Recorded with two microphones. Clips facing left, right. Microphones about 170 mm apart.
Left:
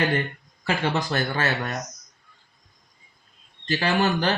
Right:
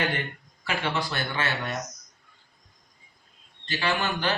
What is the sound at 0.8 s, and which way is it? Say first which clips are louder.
Speech: left 4 dB; 40° left (ahead or behind).